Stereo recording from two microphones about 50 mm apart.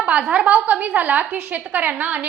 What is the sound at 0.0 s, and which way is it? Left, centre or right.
A woman's voice, right.